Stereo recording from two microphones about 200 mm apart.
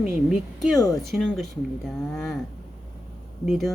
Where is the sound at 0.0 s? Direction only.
Centre (ahead or behind).